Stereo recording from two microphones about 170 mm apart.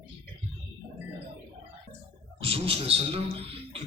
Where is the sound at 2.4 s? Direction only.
35° right (ahead or behind).